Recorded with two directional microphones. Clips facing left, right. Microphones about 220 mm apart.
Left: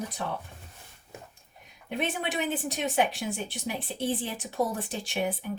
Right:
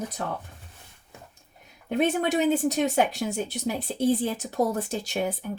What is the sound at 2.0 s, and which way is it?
Speech, 40° right (ahead or behind).